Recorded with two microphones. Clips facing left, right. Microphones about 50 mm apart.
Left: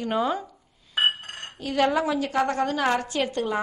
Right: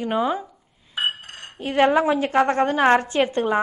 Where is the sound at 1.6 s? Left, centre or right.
Right.